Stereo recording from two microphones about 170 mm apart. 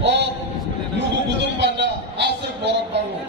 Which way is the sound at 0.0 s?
90° right.